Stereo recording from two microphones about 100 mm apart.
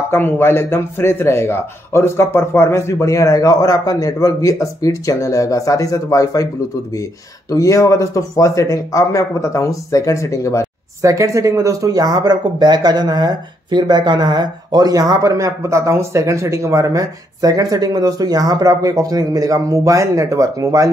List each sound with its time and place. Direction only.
0.1 s a man's voice: 25° left (ahead or behind)
7.5 s a man's voice: 35° left (ahead or behind)
11.0 s speech: 30° right (ahead or behind)